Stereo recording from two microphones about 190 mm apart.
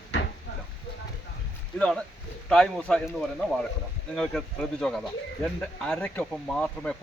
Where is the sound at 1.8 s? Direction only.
5° left (ahead or behind).